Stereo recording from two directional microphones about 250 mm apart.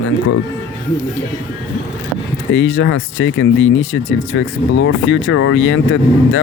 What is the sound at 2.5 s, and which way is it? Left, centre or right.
Speech, left.